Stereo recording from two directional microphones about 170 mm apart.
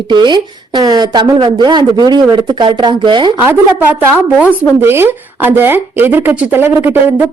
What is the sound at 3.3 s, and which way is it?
Speech, 10° right (ahead or behind).